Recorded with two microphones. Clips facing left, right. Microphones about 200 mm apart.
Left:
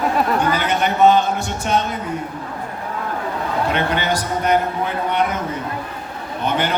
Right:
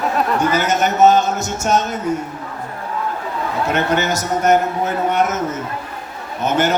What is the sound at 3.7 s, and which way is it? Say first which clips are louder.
A man's voice: right 5 dB; 45° right (ahead or behind).